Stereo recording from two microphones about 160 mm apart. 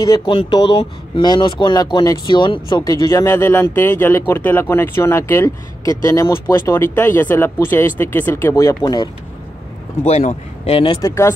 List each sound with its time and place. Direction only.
0.0 s speech: 25° left (ahead or behind)
10.0 s a man's voice: 45° left (ahead or behind)
11.0 s speech: 20° left (ahead or behind)